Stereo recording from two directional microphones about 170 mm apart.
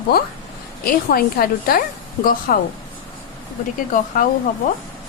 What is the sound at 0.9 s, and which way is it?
A woman's voice, 60° left (ahead or behind).